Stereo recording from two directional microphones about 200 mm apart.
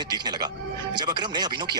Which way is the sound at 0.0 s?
20° right (ahead or behind).